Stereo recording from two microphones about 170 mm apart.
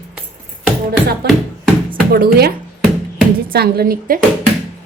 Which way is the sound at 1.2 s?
70° right (ahead or behind).